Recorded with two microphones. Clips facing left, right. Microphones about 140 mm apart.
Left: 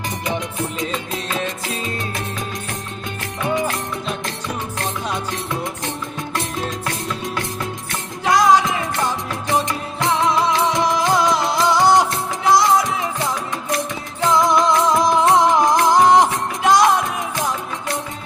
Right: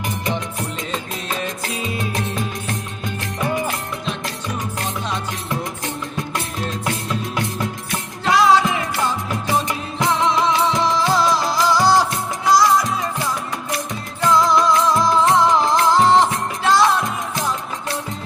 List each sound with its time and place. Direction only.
8.2 s music: 15° left (ahead or behind)
10.8 s music: 15° left (ahead or behind)
14.3 s music: 20° left (ahead or behind)